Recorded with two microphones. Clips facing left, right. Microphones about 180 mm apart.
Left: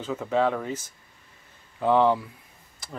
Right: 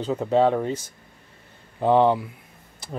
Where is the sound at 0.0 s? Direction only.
35° right (ahead or behind).